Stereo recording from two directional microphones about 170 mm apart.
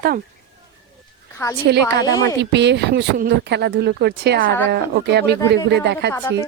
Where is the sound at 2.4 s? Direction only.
90° right.